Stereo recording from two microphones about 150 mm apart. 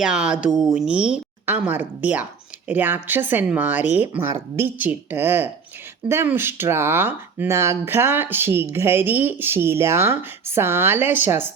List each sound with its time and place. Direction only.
0.0 s speech: 5° right (ahead or behind)